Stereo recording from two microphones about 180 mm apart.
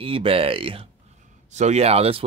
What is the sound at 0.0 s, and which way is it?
Speech, 30° right (ahead or behind).